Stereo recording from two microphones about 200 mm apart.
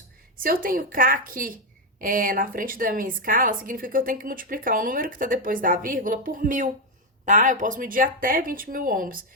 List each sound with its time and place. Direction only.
0.3 s a woman's voice: 45° right (ahead or behind)